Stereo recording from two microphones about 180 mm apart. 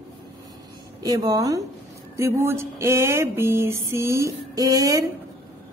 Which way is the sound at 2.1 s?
15° right (ahead or behind).